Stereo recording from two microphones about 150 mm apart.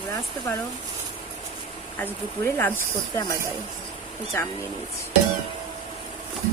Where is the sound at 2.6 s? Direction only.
15° left (ahead or behind).